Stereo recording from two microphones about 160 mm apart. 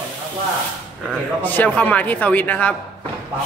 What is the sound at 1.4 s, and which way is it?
Speech, 10° left (ahead or behind).